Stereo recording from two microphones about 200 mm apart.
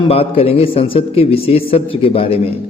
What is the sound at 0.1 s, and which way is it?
A man's voice, 30° left (ahead or behind).